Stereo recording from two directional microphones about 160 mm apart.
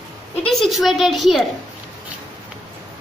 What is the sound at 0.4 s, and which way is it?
A woman's voice, centre (ahead or behind).